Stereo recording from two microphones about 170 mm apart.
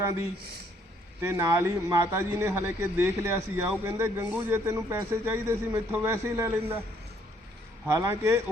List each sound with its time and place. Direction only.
0.0 s a man's voice: 15° right (ahead or behind)
7.9 s a man's voice: 15° right (ahead or behind)